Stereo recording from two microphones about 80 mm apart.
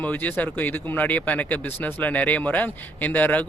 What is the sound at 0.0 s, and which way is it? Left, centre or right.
Speech, left.